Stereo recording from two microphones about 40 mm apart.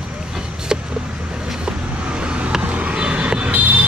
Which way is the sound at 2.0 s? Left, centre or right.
Right.